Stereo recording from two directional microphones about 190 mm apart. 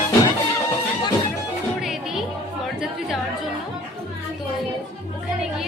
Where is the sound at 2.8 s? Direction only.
Centre (ahead or behind).